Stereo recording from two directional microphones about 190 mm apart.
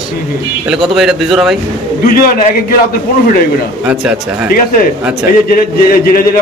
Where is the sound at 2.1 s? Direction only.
50° left (ahead or behind).